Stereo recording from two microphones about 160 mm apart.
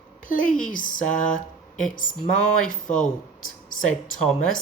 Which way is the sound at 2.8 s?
50° left (ahead or behind).